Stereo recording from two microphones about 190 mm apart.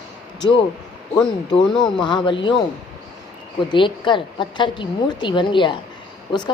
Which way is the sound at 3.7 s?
25° left (ahead or behind).